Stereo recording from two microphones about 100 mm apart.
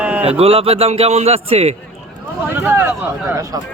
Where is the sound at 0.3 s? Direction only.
75° right (ahead or behind).